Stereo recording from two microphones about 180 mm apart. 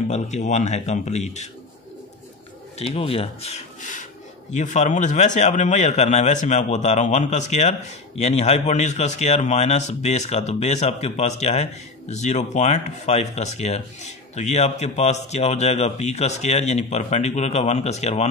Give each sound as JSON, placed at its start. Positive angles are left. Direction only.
{"t": 0.5, "sound": "a man's voice", "side_deg": 40}
{"t": 2.8, "sound": "a man's voice", "side_deg": 35}